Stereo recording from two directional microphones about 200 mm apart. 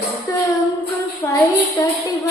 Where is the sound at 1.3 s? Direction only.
15° left (ahead or behind).